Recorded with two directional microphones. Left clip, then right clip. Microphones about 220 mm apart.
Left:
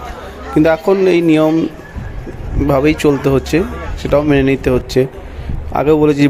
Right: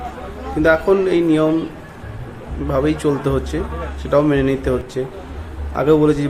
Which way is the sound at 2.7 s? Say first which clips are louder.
Left 6 dB; 30° left (ahead or behind).